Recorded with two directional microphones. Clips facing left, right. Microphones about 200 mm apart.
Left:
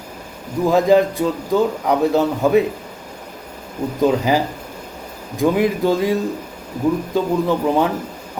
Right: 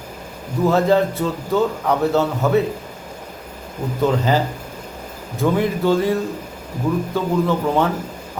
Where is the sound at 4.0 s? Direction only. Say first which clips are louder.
Left 2 dB; 15° left (ahead or behind).